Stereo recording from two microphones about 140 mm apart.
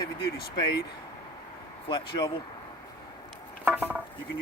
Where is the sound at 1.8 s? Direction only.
30° left (ahead or behind).